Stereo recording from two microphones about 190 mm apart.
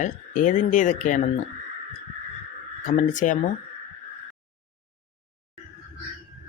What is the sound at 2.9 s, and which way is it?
Speech, 40° left (ahead or behind).